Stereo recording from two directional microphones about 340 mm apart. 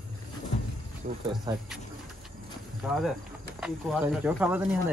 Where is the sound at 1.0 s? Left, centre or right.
Right.